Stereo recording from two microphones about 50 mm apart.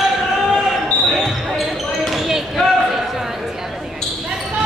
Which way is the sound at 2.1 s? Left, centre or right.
Centre.